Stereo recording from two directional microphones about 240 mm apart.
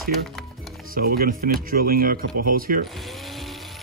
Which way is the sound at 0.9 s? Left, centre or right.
Right.